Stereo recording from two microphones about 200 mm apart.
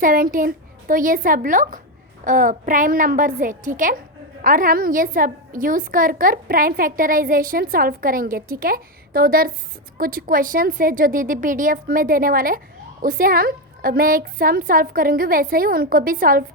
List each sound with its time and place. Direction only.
0.0 s a woman's voice: 45° right (ahead or behind)